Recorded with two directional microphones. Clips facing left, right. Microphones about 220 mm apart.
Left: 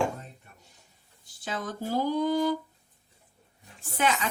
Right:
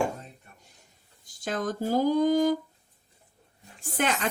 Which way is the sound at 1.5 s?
45° right (ahead or behind).